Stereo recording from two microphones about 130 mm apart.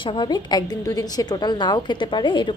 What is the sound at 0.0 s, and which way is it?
A woman's voice, 40° left (ahead or behind).